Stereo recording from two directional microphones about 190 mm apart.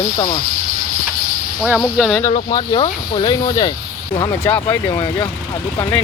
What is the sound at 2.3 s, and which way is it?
Speech, 25° left (ahead or behind).